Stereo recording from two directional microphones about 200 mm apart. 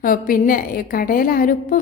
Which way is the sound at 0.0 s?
45° left (ahead or behind).